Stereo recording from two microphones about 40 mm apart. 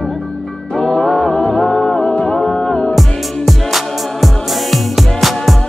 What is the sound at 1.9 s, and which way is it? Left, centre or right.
Music, left.